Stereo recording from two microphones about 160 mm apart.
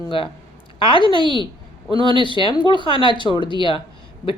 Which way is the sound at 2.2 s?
30° left (ahead or behind).